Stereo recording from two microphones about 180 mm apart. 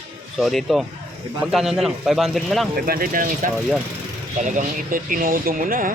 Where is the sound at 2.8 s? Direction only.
55° right (ahead or behind).